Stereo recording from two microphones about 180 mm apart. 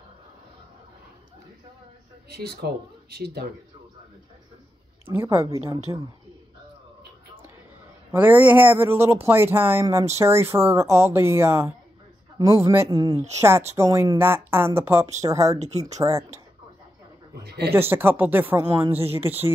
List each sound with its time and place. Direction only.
2.2 s speech: 60° right (ahead or behind)
5.1 s speech: 15° right (ahead or behind)
8.1 s a man's voice: 10° right (ahead or behind)
17.4 s speech: 65° right (ahead or behind)
17.7 s speech: 10° right (ahead or behind)